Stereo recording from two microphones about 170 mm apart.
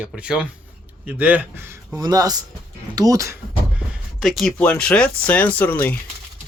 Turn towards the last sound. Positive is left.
turn(degrees=10)  # may be behind; listen again after turning